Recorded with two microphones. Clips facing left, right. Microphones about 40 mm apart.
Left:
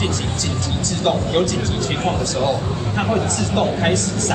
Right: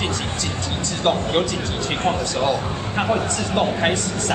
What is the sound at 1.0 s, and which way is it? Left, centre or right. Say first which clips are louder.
A man's voice: left 1 dB; centre.